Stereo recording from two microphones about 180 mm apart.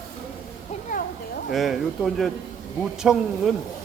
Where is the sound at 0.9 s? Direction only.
50° left (ahead or behind).